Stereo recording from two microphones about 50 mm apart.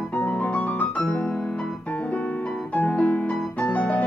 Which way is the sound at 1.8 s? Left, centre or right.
Left.